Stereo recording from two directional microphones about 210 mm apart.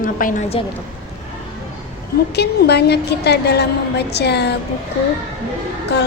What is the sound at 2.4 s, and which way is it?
A woman's voice, 50° left (ahead or behind).